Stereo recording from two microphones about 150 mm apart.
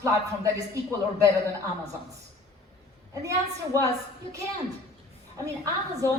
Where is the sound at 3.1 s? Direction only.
20° right (ahead or behind).